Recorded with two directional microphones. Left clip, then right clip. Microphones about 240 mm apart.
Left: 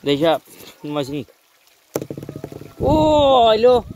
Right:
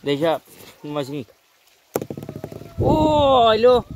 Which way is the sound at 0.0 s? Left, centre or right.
Left.